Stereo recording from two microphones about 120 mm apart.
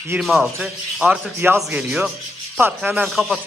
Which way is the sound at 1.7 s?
5° right (ahead or behind).